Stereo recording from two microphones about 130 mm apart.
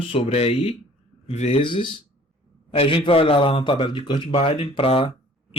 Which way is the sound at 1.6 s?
40° left (ahead or behind).